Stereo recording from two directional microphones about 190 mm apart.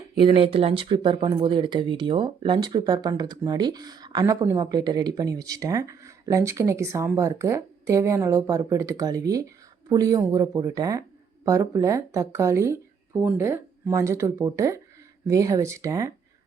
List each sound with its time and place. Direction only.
0.2 s speech: 25° right (ahead or behind)